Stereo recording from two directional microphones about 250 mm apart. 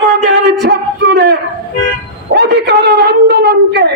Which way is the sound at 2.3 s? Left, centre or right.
Right.